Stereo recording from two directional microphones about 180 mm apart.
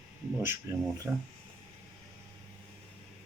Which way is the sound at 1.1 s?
15° right (ahead or behind).